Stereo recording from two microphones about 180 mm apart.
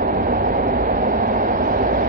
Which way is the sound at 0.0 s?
50° right (ahead or behind).